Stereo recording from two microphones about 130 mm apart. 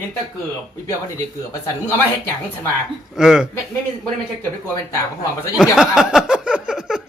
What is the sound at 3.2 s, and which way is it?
Speech, 5° right (ahead or behind).